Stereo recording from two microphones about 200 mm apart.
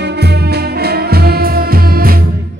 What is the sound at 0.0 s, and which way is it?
Music, 55° right (ahead or behind).